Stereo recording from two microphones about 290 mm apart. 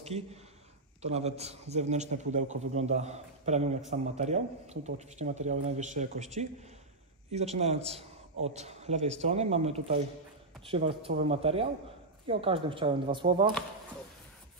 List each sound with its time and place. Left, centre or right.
0.0 s a man's voice: right